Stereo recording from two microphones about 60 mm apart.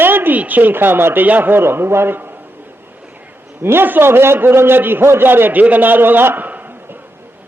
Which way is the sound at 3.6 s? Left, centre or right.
Right.